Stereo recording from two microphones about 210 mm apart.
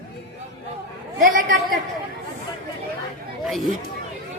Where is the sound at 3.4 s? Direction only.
Centre (ahead or behind).